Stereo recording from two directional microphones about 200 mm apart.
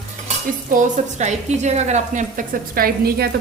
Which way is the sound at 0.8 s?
35° right (ahead or behind).